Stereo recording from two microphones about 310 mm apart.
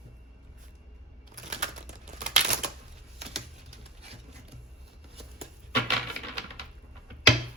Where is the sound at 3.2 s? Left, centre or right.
Centre.